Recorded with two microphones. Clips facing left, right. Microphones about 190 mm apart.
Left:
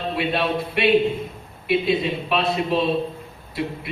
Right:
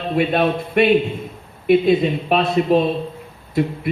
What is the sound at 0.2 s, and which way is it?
A man's voice, 50° right (ahead or behind).